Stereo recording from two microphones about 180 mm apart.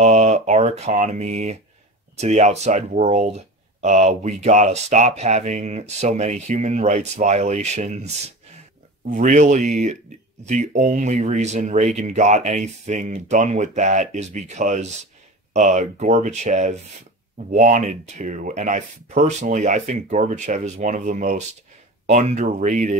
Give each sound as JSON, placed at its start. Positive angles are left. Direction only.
{"t": 0.0, "sound": "speech", "side_deg": -40}